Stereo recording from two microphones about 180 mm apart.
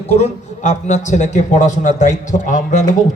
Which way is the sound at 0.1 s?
40° left (ahead or behind).